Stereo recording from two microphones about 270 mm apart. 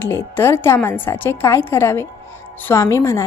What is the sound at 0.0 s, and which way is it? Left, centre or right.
A woman's voice, centre.